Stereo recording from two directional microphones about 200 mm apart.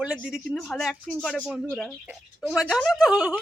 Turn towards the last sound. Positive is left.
turn(degrees=-5)  # may be behind; listen again after turning